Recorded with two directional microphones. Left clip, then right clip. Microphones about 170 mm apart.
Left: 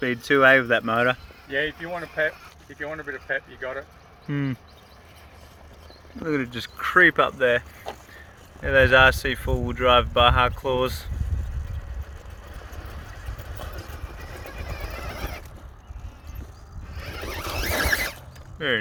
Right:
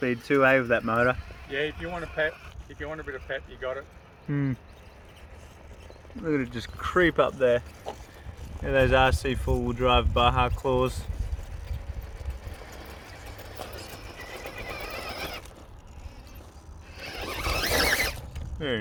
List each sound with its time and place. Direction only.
0.0 s speech: 5° right (ahead or behind)
1.5 s speech: 40° left (ahead or behind)
4.3 s speech: centre (ahead or behind)
6.2 s speech: 5° right (ahead or behind)
6.8 s speech: 20° right (ahead or behind)
8.6 s speech: 15° right (ahead or behind)
15.0 s cat: 10° right (ahead or behind)
17.1 s zipper: 10° right (ahead or behind)